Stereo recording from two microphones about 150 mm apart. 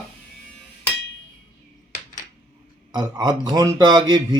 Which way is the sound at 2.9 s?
30° right (ahead or behind).